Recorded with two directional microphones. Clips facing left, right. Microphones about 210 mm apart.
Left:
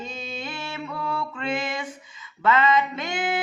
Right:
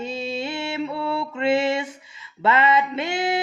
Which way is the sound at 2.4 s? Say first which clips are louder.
Right 1 dB; 30° right (ahead or behind).